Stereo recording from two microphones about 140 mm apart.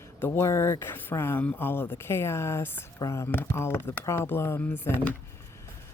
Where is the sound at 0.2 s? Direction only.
20° left (ahead or behind).